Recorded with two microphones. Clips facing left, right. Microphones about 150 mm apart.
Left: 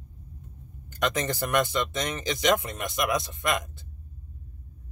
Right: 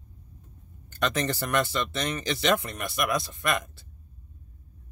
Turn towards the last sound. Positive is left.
turn(degrees=20)  # may be behind; listen again after turning